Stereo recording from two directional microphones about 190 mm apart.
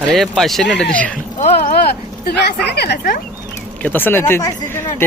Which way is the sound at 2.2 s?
60° left (ahead or behind).